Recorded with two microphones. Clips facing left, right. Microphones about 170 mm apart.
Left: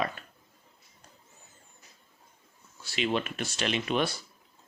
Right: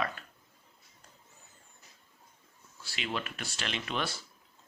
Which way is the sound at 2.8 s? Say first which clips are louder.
Left 7 dB; 20° left (ahead or behind).